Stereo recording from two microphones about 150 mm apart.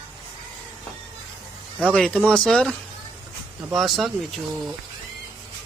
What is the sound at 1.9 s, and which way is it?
Speech, 5° left (ahead or behind).